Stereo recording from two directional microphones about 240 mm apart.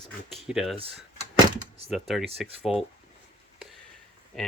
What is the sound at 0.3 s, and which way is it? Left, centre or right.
Speech, centre.